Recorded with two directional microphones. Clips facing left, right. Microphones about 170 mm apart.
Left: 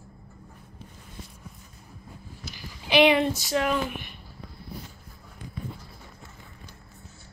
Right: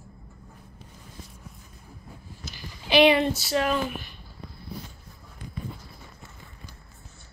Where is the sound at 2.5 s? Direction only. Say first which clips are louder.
Right 1 dB; 15° left (ahead or behind).